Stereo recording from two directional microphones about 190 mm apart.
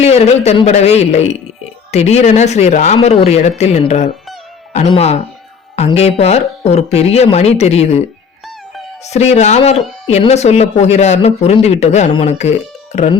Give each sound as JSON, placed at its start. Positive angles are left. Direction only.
{"t": 0.0, "sound": "speech", "side_deg": 35}
{"t": 9.0, "sound": "speech", "side_deg": 35}